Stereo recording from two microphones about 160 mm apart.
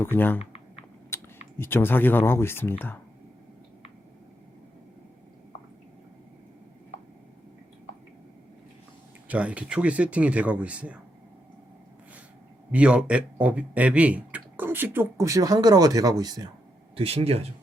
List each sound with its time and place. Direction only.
0.0 s speech: 10° left (ahead or behind)
9.2 s speech: 10° right (ahead or behind)
12.7 s speech: 5° right (ahead or behind); by 16.5 s 25° right (ahead or behind)
16.9 s speech: 35° right (ahead or behind)